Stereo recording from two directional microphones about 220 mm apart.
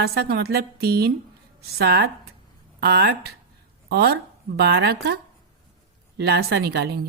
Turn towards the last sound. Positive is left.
turn(degrees=-45)  # may be behind; listen again after turning